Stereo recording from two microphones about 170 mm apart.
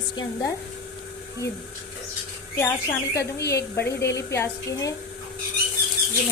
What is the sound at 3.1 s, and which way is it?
Speech, 70° left (ahead or behind).